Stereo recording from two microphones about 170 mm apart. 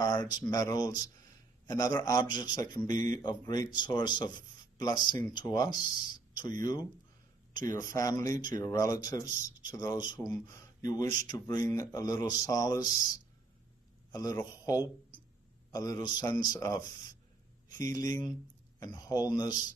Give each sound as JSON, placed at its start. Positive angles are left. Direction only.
{"t": 0.0, "sound": "a sound", "side_deg": 20}
{"t": 0.5, "sound": "a man's voice", "side_deg": 20}
{"t": 14.1, "sound": "a man's voice", "side_deg": 20}